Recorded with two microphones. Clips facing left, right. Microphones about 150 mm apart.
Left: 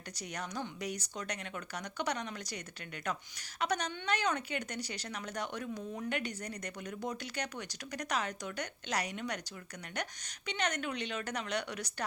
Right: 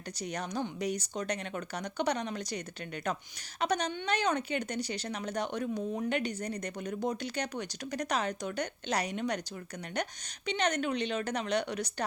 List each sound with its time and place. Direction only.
0.2 s speech: 25° right (ahead or behind)
3.6 s speech: 25° right (ahead or behind)